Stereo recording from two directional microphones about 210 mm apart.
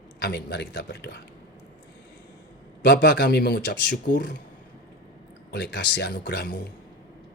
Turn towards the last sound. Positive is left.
turn(degrees=55)  # may be behind; listen again after turning